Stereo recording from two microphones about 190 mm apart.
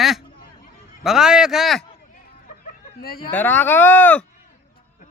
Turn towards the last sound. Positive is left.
turn(degrees=10)  # may be behind; listen again after turning